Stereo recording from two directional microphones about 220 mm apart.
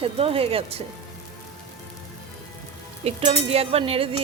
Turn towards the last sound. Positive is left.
turn(degrees=-25)  # may be behind; listen again after turning